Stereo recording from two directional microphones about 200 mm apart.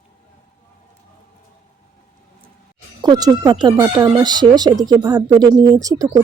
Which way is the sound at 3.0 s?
20° right (ahead or behind).